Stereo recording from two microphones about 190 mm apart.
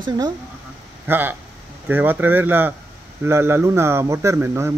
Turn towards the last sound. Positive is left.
turn(degrees=-15)  # may be behind; listen again after turning